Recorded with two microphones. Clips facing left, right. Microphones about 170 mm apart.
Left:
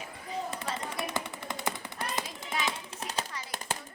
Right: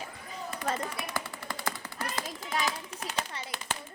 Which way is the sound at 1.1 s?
20° left (ahead or behind).